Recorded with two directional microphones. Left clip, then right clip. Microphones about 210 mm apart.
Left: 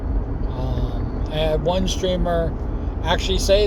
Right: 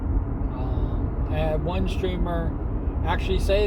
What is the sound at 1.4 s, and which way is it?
Speech, 40° left (ahead or behind).